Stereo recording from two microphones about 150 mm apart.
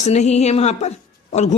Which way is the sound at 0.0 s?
50° left (ahead or behind).